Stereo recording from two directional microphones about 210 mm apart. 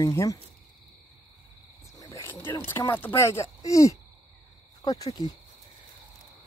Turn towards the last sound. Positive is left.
turn(degrees=15)  # may be behind; listen again after turning